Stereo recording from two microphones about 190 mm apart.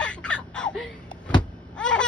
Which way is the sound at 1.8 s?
5° left (ahead or behind).